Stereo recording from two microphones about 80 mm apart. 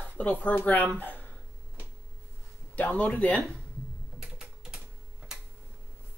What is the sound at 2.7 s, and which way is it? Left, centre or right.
Speech, centre.